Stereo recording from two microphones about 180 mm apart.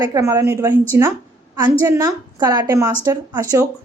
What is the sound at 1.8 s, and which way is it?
A woman's voice, 15° right (ahead or behind).